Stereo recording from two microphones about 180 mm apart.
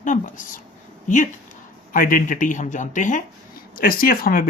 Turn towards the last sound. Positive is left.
turn(degrees=55)  # may be behind; listen again after turning